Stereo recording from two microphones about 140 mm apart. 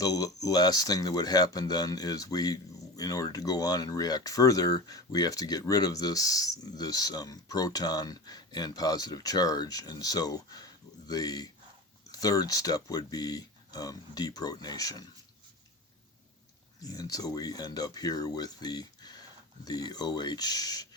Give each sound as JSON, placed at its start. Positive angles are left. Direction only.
{"t": 0.0, "sound": "speech", "side_deg": 25}
{"t": 16.8, "sound": "speech", "side_deg": 25}